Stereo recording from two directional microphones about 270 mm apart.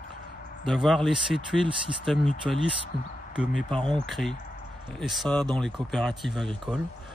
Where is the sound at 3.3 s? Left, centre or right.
Centre.